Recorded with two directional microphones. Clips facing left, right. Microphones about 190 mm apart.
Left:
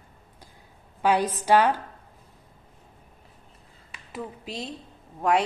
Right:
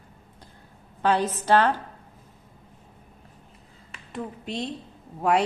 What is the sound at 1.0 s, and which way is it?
Speech, 10° left (ahead or behind).